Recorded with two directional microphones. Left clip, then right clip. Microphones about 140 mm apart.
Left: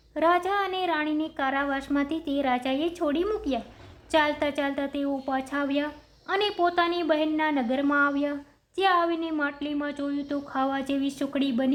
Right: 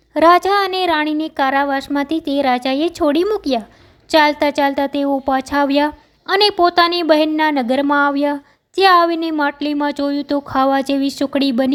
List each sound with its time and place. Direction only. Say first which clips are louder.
0.1 s a woman's voice: right 12 dB; 50° right (ahead or behind)